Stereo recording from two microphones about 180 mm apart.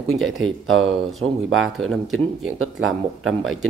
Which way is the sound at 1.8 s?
Centre (ahead or behind).